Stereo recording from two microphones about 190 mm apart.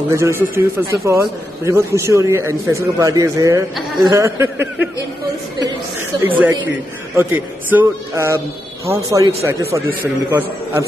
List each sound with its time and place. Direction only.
0.1 s speech: 15° right (ahead or behind)
6.2 s speech: 10° right (ahead or behind)